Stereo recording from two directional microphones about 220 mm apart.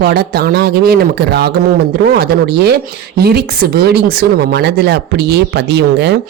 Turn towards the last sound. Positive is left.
turn(degrees=-50)  # may be behind; listen again after turning